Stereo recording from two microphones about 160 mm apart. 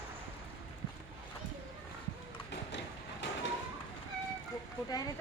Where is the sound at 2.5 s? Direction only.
90° left.